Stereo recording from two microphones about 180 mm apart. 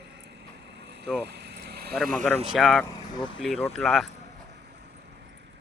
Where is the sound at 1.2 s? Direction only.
70° right (ahead or behind).